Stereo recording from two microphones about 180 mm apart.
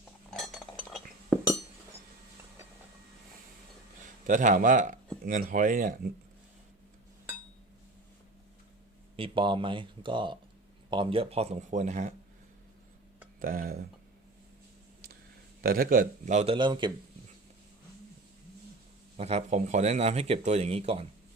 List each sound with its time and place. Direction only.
0.3 s chink: centre (ahead or behind)
4.3 s speech: 45° right (ahead or behind)
9.1 s speech: 30° right (ahead or behind)
13.4 s speech: 55° right (ahead or behind)
15.6 s speech: 55° right (ahead or behind); by 16.9 s 25° right (ahead or behind)
19.1 s speech: 35° right (ahead or behind)